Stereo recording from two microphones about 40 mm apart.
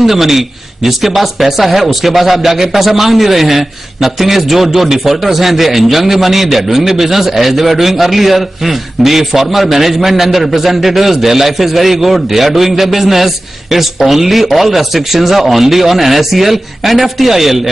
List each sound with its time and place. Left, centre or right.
0.0 s speech: centre